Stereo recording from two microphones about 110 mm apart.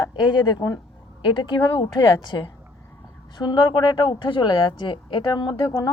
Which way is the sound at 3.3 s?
40° left (ahead or behind).